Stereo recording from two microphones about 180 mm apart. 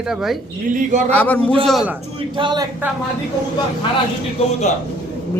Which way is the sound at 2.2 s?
25° right (ahead or behind).